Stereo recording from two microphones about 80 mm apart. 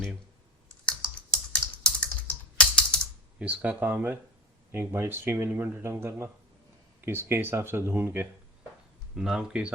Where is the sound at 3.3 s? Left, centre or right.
Centre.